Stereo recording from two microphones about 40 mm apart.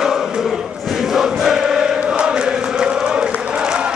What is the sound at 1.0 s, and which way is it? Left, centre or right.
Choir, centre.